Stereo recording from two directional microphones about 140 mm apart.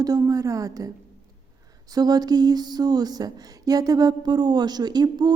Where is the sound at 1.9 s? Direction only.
30° right (ahead or behind).